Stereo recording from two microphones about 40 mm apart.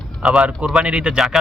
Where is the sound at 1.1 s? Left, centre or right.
Centre.